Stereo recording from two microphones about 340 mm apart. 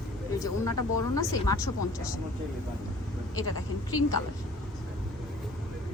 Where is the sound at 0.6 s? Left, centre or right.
Left.